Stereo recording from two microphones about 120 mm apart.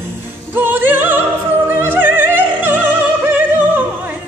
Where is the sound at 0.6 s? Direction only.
15° right (ahead or behind).